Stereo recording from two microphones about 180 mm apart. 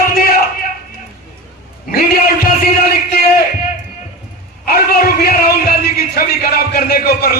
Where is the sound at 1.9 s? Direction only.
55° left (ahead or behind).